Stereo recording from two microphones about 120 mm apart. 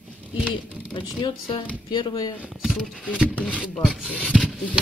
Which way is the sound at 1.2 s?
45° left (ahead or behind).